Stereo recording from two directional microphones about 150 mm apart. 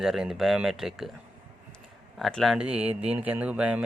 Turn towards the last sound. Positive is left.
turn(degrees=-10)  # may be behind; listen again after turning